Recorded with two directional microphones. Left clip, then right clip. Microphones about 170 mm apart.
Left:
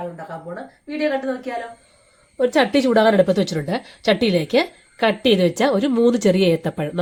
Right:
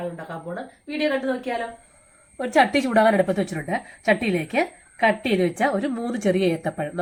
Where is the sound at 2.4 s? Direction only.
75° left (ahead or behind).